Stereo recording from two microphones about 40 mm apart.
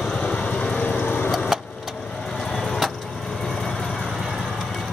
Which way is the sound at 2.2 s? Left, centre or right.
Centre.